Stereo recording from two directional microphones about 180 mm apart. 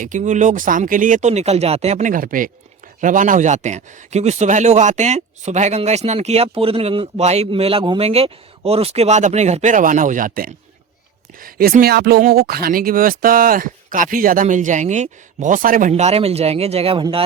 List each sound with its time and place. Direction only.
0.0 s speech: 45° right (ahead or behind)